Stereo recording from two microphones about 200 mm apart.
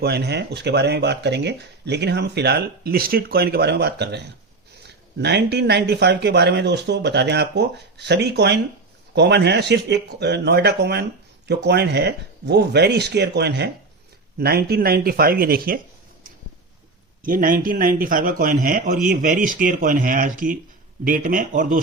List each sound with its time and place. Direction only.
0.0 s speech: 55° right (ahead or behind)
17.2 s speech: 45° right (ahead or behind)